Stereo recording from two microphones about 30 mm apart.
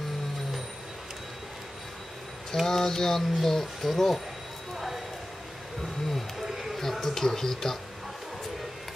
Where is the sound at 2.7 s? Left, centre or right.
Centre.